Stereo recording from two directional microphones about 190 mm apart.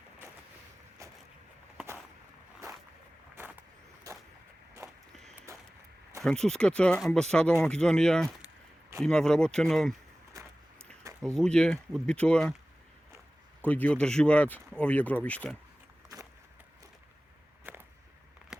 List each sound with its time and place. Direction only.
3.3 s vehicle: 10° right (ahead or behind)
4.8 s walk: 15° right (ahead or behind)
6.2 s speech: 5° left (ahead or behind)
11.3 s speech: 5° left (ahead or behind)
13.7 s speech: 10° left (ahead or behind)
17.6 s whip: 10° right (ahead or behind)